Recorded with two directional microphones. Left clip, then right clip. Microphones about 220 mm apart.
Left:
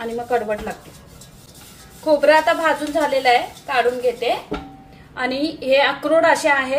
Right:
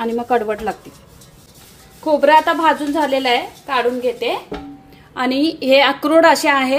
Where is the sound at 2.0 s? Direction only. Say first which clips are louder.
Right 2 dB; 35° right (ahead or behind).